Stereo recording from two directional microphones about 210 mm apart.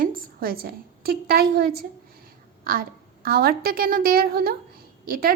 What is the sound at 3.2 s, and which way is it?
Speech, 45° right (ahead or behind).